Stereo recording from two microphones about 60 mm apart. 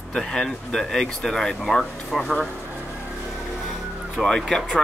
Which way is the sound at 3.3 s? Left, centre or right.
Centre.